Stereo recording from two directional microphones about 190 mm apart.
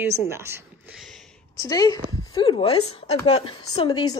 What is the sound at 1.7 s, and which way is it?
Speech, 20° left (ahead or behind).